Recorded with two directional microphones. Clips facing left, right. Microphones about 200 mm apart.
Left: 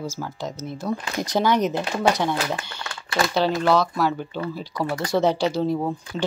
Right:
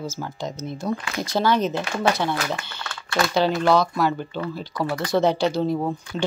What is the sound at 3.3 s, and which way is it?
Speech, centre (ahead or behind).